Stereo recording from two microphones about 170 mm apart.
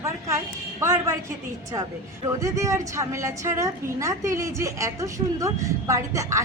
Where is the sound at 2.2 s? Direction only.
20° right (ahead or behind).